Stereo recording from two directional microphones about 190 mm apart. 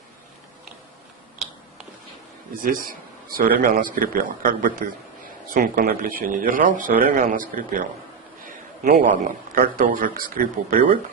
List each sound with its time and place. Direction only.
2.6 s a man's voice: 50° right (ahead or behind)